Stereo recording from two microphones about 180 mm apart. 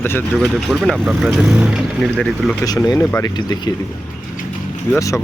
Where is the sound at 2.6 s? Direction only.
20° left (ahead or behind).